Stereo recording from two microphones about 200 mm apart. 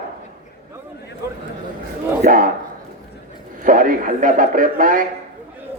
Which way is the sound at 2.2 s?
45° right (ahead or behind).